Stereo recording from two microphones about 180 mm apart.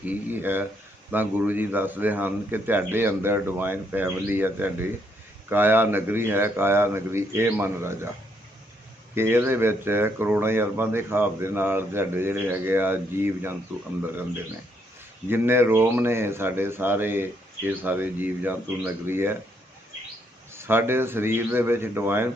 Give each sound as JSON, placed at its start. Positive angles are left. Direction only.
{"t": 0.0, "sound": "speech", "side_deg": -10}
{"t": 9.1, "sound": "speech", "side_deg": -15}
{"t": 15.3, "sound": "speech", "side_deg": -10}
{"t": 20.5, "sound": "speech", "side_deg": -15}